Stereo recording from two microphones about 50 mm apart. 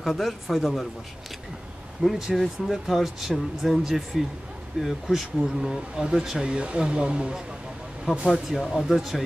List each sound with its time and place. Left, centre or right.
0.0 s speech: centre
2.0 s speech: centre
8.0 s speech: centre